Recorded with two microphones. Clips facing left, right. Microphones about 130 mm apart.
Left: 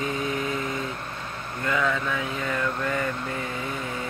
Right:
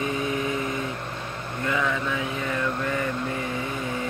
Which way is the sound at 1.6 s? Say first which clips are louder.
Left 1 dB; 20° right (ahead or behind).